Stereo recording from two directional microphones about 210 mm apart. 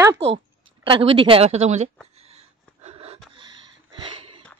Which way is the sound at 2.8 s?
30° right (ahead or behind).